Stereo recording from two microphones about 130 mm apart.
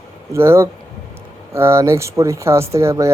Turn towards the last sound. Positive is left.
turn(degrees=-20)  # may be behind; listen again after turning